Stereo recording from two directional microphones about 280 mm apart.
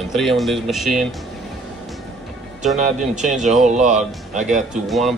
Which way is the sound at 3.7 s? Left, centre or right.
Right.